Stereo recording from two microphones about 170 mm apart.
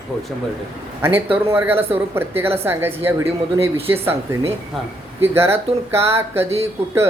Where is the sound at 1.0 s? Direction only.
10° right (ahead or behind).